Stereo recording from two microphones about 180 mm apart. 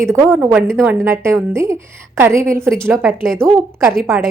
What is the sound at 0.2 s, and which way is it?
Speech, 15° right (ahead or behind).